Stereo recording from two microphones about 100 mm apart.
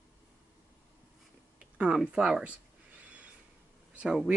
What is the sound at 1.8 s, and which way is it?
Speech, 10° right (ahead or behind).